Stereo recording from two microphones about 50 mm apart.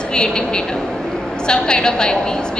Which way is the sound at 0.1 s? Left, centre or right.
Centre.